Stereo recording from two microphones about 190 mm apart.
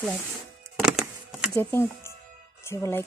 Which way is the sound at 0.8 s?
5° right (ahead or behind).